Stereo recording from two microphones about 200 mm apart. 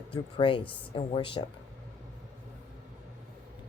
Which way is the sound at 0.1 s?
25° left (ahead or behind).